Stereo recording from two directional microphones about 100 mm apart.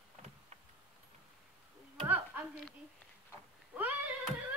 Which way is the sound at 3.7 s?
15° right (ahead or behind).